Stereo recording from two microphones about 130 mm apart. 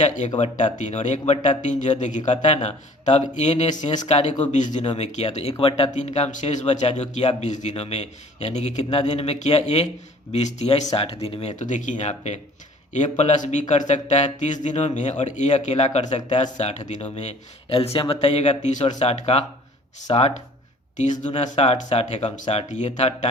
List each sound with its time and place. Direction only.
0.3 s speech: 65° left (ahead or behind)
4.5 s speech: 70° left (ahead or behind); by 5.9 s 45° left (ahead or behind)
5.9 s speech: 65° left (ahead or behind)
10.9 s speech: 50° left (ahead or behind)
11.6 s speech: 75° left (ahead or behind); by 20.3 s 50° left (ahead or behind)
20.9 s speech: 70° left (ahead or behind)
21.3 s speech: 60° left (ahead or behind)